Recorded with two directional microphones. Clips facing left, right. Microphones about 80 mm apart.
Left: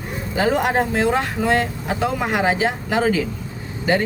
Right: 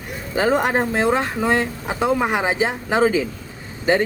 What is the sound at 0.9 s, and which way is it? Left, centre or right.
Speech, right.